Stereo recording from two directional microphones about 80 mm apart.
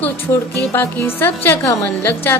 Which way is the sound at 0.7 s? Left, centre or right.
Left.